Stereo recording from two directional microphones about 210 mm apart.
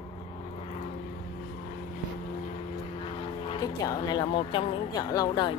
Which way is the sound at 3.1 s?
25° left (ahead or behind).